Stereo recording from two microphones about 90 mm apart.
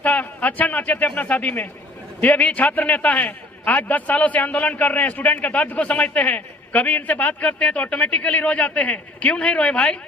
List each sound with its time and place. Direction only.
0.0 s a man's voice: 15° left (ahead or behind)